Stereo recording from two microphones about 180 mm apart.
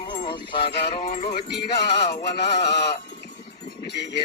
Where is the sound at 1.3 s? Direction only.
65° left (ahead or behind).